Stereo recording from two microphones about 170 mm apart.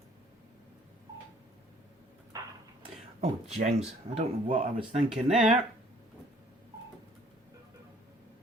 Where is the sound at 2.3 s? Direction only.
20° right (ahead or behind).